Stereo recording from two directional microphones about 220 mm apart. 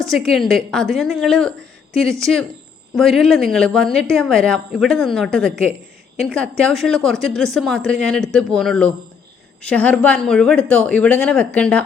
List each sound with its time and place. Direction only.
0.0 s speech: centre (ahead or behind)
2.9 s speech: centre (ahead or behind)